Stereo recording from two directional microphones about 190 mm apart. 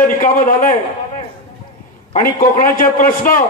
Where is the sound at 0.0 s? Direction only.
45° left (ahead or behind).